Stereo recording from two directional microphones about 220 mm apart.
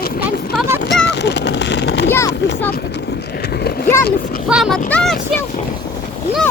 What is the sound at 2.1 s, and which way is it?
Speech, 15° left (ahead or behind).